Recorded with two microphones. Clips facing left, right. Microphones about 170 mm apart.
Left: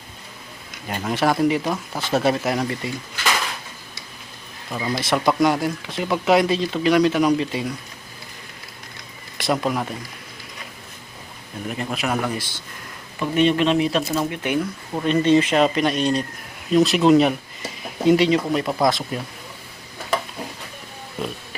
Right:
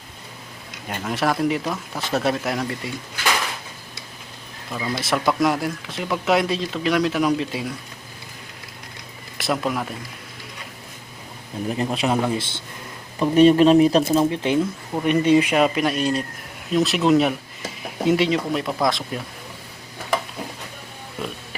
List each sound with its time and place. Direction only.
0.9 s speech: centre (ahead or behind)
4.9 s speech: centre (ahead or behind)
9.4 s speech: centre (ahead or behind)
11.7 s speech: 30° right (ahead or behind)
13.1 s speech: 35° right (ahead or behind)
14.2 s speech: 30° right (ahead or behind)
14.9 s speech: 10° right (ahead or behind)